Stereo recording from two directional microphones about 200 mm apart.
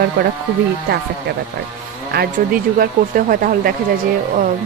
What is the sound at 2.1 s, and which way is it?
Speech, 45° right (ahead or behind).